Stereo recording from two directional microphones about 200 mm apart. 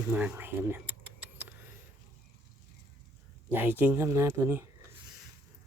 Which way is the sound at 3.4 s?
10° right (ahead or behind).